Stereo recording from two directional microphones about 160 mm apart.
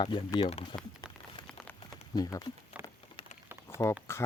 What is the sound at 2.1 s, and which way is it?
Speech, 25° left (ahead or behind).